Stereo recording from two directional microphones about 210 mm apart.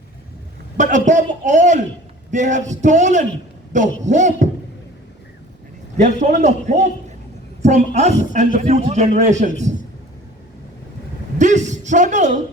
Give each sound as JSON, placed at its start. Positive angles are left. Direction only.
{"t": 0.8, "sound": "a man's voice", "side_deg": -35}
{"t": 6.0, "sound": "a man's voice", "side_deg": -35}
{"t": 11.3, "sound": "speech", "side_deg": -35}